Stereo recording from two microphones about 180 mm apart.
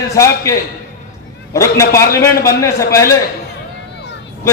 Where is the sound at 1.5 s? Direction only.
15° left (ahead or behind).